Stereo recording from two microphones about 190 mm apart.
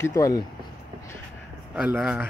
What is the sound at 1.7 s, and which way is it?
Speech, 5° right (ahead or behind).